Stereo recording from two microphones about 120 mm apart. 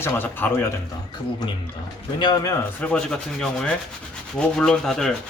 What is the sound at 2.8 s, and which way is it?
Sanding, 10° left (ahead or behind).